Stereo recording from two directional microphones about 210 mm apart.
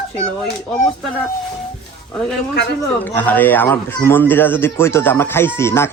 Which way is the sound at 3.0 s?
10° left (ahead or behind).